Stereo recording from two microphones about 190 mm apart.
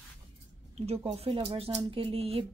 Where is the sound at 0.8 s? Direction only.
30° right (ahead or behind).